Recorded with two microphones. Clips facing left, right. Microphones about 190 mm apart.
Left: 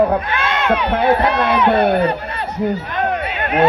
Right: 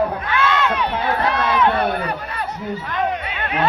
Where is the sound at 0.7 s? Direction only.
60° left (ahead or behind).